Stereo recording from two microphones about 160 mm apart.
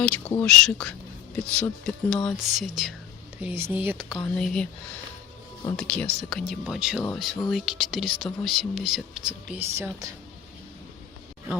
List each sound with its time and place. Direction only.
0.0 s speech: 10° left (ahead or behind)
3.4 s speech: 15° right (ahead or behind)
4.4 s speech: 5° left (ahead or behind)
5.7 s speech: 5° left (ahead or behind)
9.6 s speech: 15° right (ahead or behind)